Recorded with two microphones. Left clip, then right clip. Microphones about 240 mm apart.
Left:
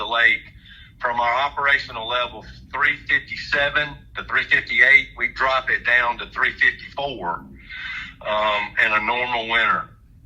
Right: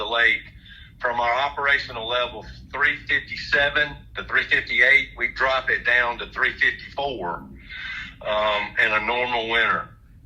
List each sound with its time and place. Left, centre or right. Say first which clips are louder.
0.0 s a man's voice: left 2 dB; left